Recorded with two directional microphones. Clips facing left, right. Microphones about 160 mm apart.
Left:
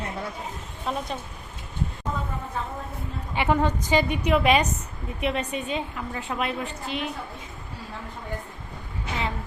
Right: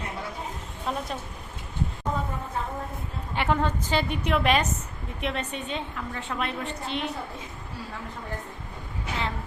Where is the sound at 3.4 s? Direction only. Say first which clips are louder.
Left 2 dB; 10° left (ahead or behind).